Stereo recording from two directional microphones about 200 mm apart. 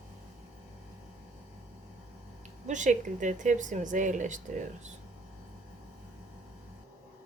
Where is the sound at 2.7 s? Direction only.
40° right (ahead or behind).